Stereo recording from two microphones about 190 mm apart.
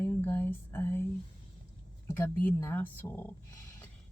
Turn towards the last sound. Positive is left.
turn(degrees=10)  # may be behind; listen again after turning